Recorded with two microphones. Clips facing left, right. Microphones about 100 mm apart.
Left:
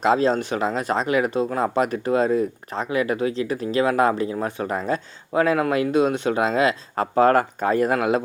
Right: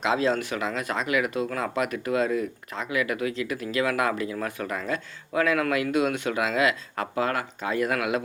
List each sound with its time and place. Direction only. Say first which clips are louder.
0.0 s speech: left 5 dB; 40° left (ahead or behind)